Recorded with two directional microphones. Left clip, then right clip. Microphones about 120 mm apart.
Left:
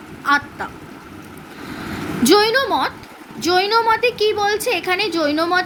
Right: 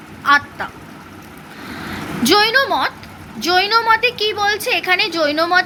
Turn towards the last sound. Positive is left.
turn(degrees=30)  # may be behind; listen again after turning